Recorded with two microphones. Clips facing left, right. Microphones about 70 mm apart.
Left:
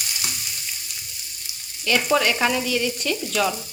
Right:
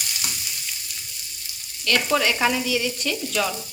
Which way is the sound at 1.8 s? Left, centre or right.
Centre.